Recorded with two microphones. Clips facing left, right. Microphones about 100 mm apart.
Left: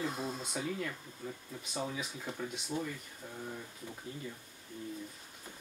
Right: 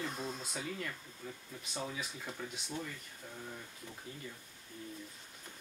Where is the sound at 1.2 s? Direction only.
15° left (ahead or behind).